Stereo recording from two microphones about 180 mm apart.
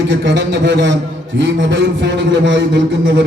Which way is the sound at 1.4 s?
80° right.